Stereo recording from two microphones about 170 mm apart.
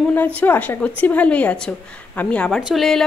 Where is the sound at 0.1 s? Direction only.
10° left (ahead or behind).